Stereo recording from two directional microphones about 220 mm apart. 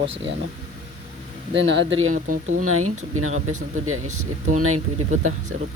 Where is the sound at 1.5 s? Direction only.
55° right (ahead or behind); by 2.9 s 75° right (ahead or behind).